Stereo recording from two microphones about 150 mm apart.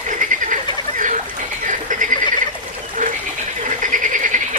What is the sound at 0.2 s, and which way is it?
Frog, 60° right (ahead or behind).